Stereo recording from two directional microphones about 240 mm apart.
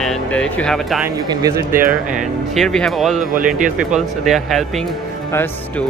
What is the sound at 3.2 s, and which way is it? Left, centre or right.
Speech, right.